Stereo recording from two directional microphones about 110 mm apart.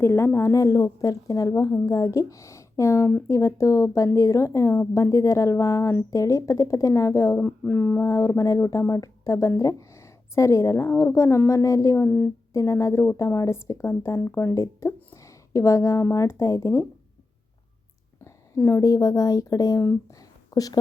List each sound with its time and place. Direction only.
0.0 s a woman's voice: 20° left (ahead or behind)
12.0 s speech: 15° left (ahead or behind)
12.5 s a woman's voice: 25° left (ahead or behind)
18.3 s speech: 25° left (ahead or behind)